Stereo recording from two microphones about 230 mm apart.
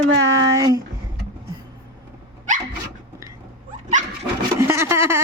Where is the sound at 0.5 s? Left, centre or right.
Centre.